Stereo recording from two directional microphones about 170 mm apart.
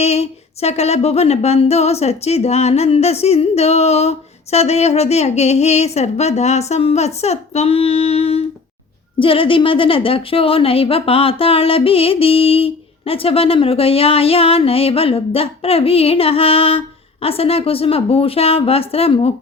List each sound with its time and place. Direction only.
0.0 s a woman's voice: 40° left (ahead or behind)